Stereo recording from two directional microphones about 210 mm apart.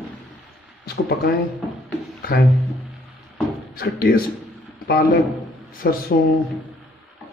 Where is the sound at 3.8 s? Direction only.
45° left (ahead or behind).